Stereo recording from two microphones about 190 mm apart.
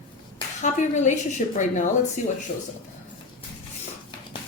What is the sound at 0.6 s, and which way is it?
Speech, 40° left (ahead or behind).